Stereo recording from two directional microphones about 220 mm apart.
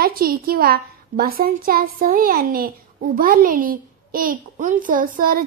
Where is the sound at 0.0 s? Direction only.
40° right (ahead or behind).